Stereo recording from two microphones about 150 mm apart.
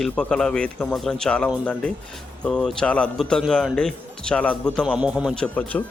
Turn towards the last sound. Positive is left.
turn(degrees=5)  # may be behind; listen again after turning